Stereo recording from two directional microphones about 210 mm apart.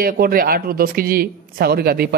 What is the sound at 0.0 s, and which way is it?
A man's voice, 45° right (ahead or behind).